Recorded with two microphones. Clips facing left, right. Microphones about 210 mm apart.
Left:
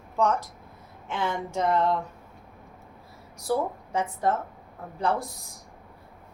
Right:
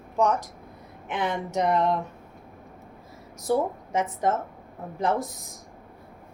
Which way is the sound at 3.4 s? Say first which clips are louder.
Right 2 dB; 20° right (ahead or behind).